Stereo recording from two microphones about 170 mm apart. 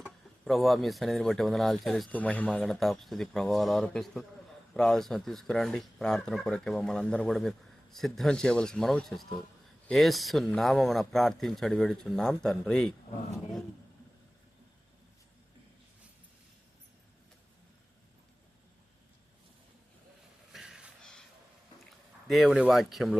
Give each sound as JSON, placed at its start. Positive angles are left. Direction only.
{"t": 0.0, "sound": "speech", "side_deg": 0}
{"t": 20.5, "sound": "a sound", "side_deg": 0}
{"t": 22.3, "sound": "speech", "side_deg": 0}